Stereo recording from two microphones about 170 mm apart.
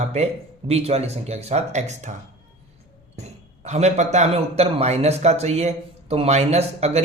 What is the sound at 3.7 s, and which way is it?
A man's voice, 40° right (ahead or behind).